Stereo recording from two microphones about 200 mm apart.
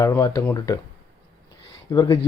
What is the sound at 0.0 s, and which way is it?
Speech, 15° left (ahead or behind).